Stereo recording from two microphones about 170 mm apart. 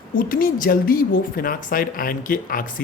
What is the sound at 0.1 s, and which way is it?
A woman's voice, 55° left (ahead or behind).